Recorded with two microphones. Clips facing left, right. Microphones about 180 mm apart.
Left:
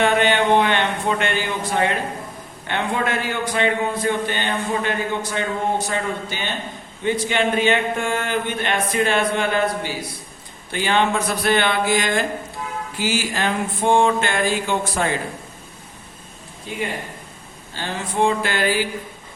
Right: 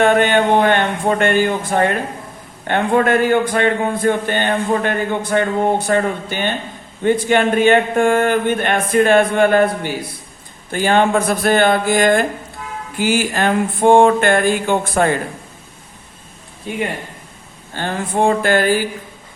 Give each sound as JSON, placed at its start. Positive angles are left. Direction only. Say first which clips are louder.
{"t": 0.0, "sound": "a sound", "louder": "right 4 dB", "side_deg": -45}
{"t": 2.6, "sound": "a man's voice", "louder": "right 8 dB", "side_deg": -50}
{"t": 16.7, "sound": "a man's voice", "louder": "right 4 dB", "side_deg": -60}